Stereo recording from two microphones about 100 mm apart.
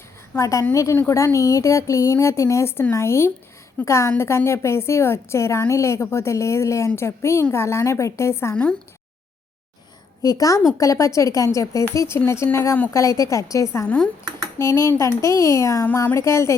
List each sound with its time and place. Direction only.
0.3 s a woman's voice: 30° left (ahead or behind)
10.2 s speech: 35° left (ahead or behind)
12.9 s speech: 30° left (ahead or behind)
13.8 s speech: 10° left (ahead or behind)
14.6 s a woman's voice: 35° left (ahead or behind)